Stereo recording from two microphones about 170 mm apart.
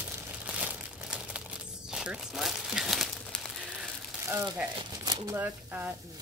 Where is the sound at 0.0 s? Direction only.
10° right (ahead or behind).